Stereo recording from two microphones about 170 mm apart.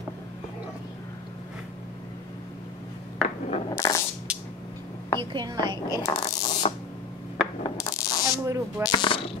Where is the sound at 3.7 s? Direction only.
20° left (ahead or behind).